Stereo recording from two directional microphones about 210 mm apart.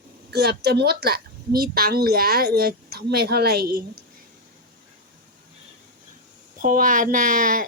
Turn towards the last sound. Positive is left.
turn(degrees=-40)  # may be behind; listen again after turning